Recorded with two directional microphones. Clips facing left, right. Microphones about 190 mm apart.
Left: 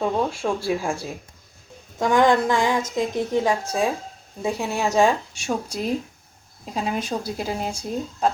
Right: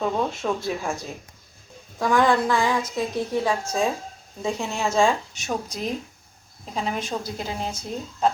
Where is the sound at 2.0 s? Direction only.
20° left (ahead or behind).